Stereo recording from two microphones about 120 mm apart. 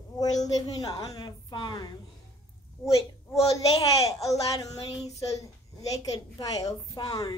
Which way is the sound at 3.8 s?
30° left (ahead or behind).